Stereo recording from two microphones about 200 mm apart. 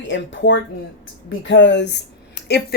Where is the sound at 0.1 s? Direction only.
65° left (ahead or behind).